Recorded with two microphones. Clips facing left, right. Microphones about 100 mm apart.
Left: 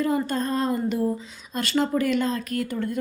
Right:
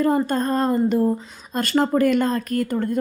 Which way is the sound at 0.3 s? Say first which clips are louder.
Right 4 dB; 45° right (ahead or behind).